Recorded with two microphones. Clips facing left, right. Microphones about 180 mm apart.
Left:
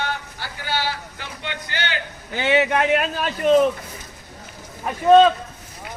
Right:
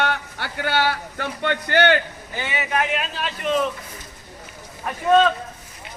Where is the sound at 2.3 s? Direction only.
75° left (ahead or behind); by 3.5 s 50° left (ahead or behind).